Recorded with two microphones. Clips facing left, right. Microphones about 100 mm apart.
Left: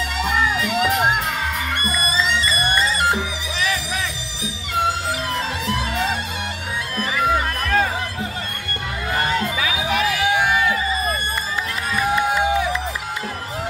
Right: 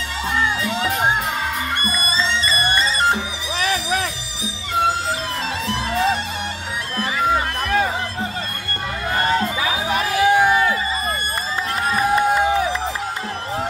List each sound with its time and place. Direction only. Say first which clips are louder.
0.6 s music: left 2 dB; 25° right (ahead or behind)
3.5 s music: right 4 dB; 45° right (ahead or behind)
5.9 s music: right 7 dB; 30° right (ahead or behind)
9.3 s music: right 2 dB; 30° right (ahead or behind)
11.9 s music: right 2 dB; 40° right (ahead or behind)